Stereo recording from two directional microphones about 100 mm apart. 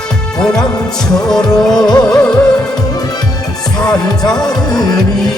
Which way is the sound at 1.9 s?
40° left (ahead or behind).